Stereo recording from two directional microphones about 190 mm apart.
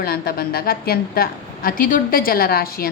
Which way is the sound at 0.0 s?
55° left (ahead or behind).